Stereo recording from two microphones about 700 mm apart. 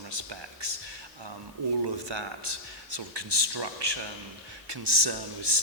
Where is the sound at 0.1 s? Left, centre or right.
Right.